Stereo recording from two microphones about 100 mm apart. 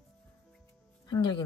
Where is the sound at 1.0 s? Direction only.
45° left (ahead or behind).